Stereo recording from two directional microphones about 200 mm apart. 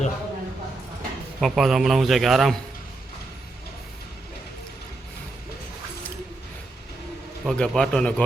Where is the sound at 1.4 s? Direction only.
Centre (ahead or behind).